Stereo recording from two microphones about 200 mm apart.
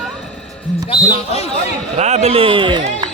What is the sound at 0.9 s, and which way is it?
Speech, 30° left (ahead or behind).